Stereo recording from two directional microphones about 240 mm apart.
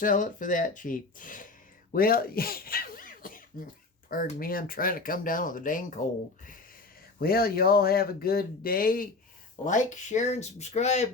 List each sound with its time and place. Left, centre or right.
0.0 s speech: left
7.2 s speech: left